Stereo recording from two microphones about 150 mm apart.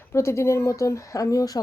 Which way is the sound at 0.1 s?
20° left (ahead or behind).